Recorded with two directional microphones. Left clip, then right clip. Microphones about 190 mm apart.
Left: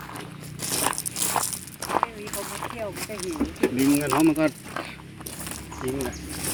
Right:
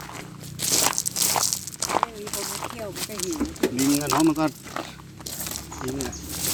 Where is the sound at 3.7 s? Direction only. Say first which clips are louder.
Even; 10° right (ahead or behind).